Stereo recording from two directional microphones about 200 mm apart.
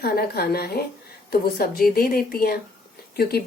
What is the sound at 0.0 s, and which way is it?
Speech, 50° left (ahead or behind).